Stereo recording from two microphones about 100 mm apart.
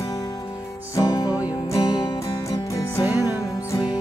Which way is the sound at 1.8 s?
50° left (ahead or behind).